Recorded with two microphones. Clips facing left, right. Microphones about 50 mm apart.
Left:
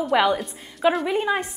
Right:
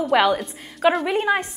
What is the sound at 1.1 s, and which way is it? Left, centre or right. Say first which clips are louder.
Speech: right 2 dB; right.